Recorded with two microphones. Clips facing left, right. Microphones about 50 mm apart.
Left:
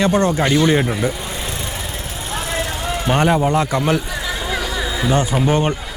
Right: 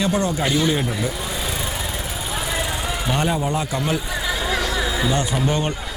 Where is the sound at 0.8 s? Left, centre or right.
Centre.